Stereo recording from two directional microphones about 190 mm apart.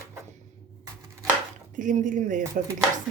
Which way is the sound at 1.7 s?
45° right (ahead or behind).